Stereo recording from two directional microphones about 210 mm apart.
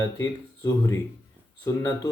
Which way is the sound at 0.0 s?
15° left (ahead or behind).